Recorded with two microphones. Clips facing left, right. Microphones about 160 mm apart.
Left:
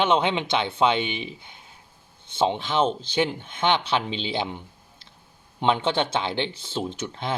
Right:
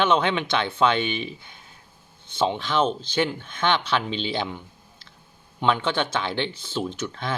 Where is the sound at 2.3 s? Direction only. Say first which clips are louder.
Even; 20° left (ahead or behind).